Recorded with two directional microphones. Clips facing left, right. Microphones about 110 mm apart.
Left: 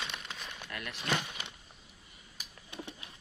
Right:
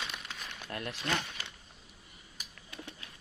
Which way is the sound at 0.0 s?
Centre (ahead or behind).